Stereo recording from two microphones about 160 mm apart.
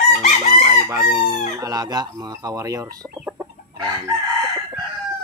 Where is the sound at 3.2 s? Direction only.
15° right (ahead or behind).